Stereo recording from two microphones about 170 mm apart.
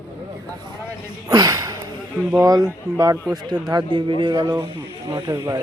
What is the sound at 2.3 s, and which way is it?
A man's voice, 20° right (ahead or behind).